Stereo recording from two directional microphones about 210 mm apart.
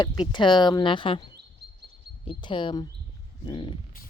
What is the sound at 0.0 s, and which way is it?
Speech, 20° left (ahead or behind).